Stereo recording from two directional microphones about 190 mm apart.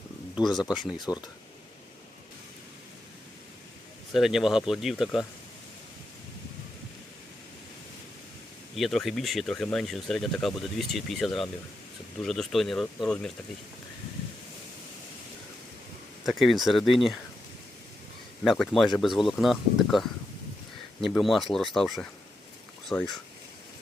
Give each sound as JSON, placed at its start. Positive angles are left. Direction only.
{"t": 0.4, "sound": "speech", "side_deg": 20}
{"t": 4.1, "sound": "speech", "side_deg": 0}
{"t": 8.7, "sound": "speech", "side_deg": 0}
{"t": 16.2, "sound": "speech", "side_deg": 0}
{"t": 18.4, "sound": "speech", "side_deg": 0}